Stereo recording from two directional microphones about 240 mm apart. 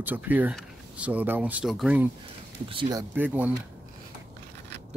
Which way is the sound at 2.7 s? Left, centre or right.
Centre.